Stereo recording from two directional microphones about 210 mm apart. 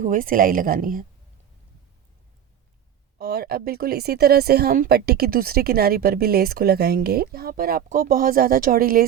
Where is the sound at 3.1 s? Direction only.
45° right (ahead or behind).